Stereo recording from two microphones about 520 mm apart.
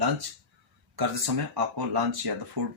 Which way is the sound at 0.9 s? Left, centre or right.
Right.